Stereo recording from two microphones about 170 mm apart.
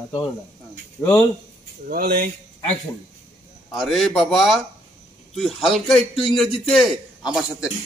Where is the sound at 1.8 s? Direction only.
65° right (ahead or behind).